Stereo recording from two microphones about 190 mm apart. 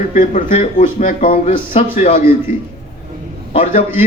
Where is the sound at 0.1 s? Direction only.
45° left (ahead or behind).